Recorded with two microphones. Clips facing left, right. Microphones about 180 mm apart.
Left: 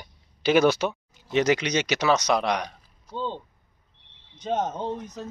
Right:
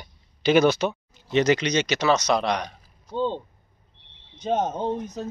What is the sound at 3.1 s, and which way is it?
Speech, 20° right (ahead or behind).